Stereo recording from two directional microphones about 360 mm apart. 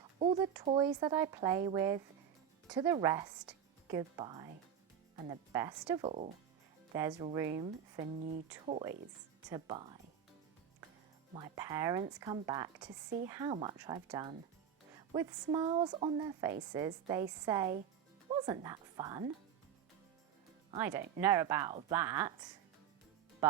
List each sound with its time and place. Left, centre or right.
0.2 s speech: centre
11.3 s a woman's voice: centre
20.7 s speech: centre